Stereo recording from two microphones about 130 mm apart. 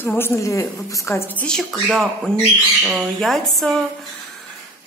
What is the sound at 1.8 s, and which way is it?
Speech, centre (ahead or behind).